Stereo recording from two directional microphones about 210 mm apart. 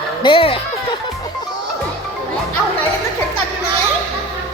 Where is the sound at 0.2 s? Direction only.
25° left (ahead or behind).